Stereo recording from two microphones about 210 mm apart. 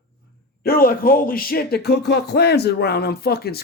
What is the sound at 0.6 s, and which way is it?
Speech, 45° left (ahead or behind).